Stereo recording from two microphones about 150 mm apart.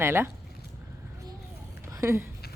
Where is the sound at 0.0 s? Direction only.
15° right (ahead or behind).